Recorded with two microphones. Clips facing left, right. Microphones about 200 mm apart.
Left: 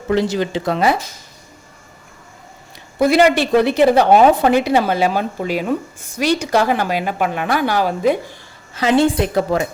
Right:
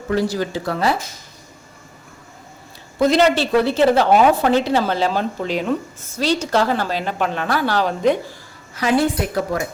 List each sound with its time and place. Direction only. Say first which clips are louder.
0.1 s a woman's voice: left 3 dB; 20° left (ahead or behind)
3.0 s speech: left 2 dB; 10° left (ahead or behind)
8.7 s a woman's voice: left 3 dB; 25° left (ahead or behind)